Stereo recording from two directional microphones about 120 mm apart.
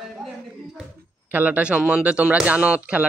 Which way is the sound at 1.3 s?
15° right (ahead or behind).